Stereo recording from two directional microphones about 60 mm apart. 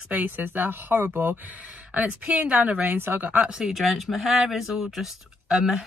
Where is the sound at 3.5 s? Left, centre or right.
Centre.